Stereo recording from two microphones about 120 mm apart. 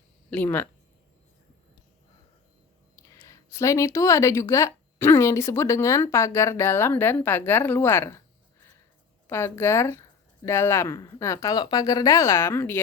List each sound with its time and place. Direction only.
0.3 s speech: 15° left (ahead or behind)
2.9 s speech: 25° left (ahead or behind)
9.2 s speech: 20° left (ahead or behind)